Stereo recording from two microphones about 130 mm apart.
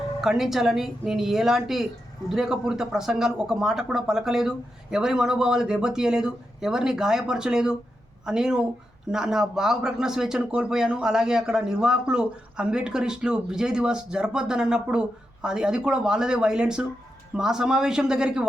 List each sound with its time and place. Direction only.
0.2 s a man's voice: 5° right (ahead or behind)